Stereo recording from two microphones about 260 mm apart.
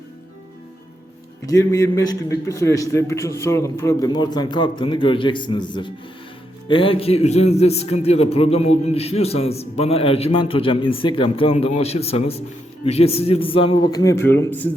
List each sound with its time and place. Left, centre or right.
1.5 s a man's voice: centre